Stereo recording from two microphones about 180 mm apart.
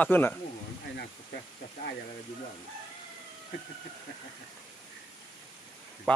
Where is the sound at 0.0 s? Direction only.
10° left (ahead or behind).